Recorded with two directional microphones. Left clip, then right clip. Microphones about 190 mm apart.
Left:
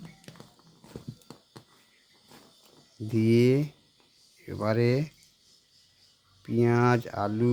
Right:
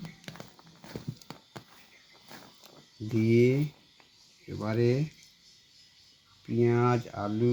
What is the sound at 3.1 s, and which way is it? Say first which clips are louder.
Speech: left 2 dB; 40° left (ahead or behind).